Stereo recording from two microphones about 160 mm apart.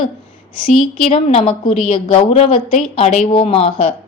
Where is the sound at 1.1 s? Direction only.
45° left (ahead or behind).